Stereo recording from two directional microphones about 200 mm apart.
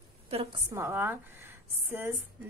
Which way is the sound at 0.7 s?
10° right (ahead or behind).